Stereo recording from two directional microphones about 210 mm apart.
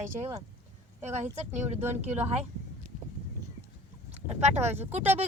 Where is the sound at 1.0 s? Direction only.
30° right (ahead or behind).